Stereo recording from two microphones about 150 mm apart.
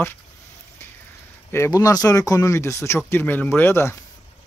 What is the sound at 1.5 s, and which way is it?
Speech, 20° left (ahead or behind).